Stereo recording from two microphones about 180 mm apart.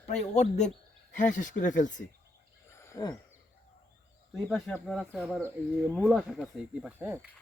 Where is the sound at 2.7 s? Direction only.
15° left (ahead or behind).